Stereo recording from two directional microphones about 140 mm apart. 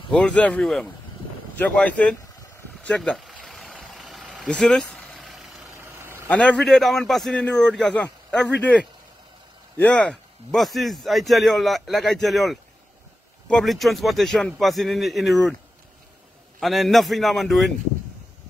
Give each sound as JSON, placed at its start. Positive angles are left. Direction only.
{"t": 0.1, "sound": "a man's voice", "side_deg": 10}
{"t": 2.8, "sound": "vehicle", "side_deg": 5}
{"t": 5.8, "sound": "vehicle", "side_deg": -15}
{"t": 6.2, "sound": "a man's voice", "side_deg": 10}
{"t": 16.5, "sound": "a man's voice", "side_deg": 0}